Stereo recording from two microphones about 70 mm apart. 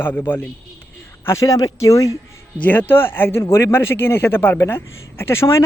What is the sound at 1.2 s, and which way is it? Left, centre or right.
Speech, left.